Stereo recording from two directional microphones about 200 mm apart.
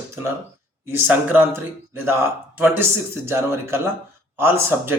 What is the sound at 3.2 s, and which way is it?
Speech, 10° right (ahead or behind).